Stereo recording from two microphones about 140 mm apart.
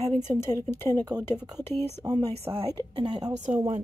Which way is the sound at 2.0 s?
30° right (ahead or behind).